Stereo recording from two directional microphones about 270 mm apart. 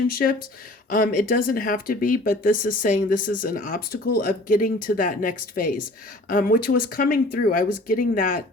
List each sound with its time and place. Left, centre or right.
0.1 s speech: left